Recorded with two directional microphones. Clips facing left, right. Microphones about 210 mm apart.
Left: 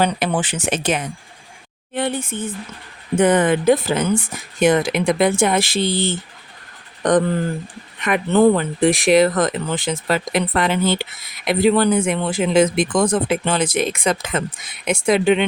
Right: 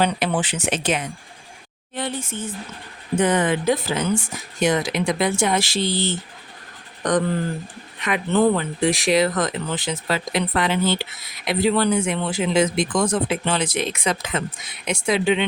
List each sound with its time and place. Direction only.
0.0 s speech: 45° left (ahead or behind)
2.0 s speech: 55° left (ahead or behind)
8.0 s speech: 50° left (ahead or behind)